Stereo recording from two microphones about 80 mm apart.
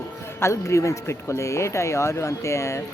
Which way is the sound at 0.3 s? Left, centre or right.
Left.